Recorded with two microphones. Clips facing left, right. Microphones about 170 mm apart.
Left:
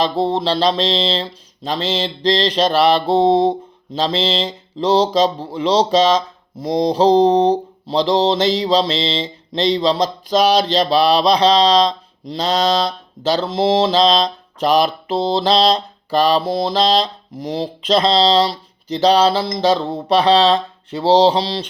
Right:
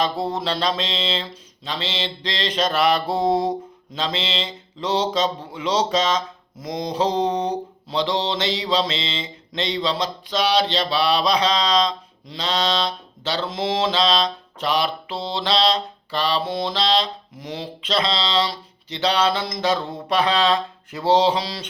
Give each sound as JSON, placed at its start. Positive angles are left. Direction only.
{"t": 0.0, "sound": "speech", "side_deg": 30}